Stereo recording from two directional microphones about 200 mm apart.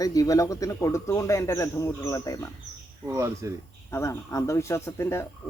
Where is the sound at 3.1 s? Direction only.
15° right (ahead or behind).